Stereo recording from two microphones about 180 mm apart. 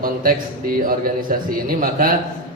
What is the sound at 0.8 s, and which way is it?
A man's voice, 50° right (ahead or behind).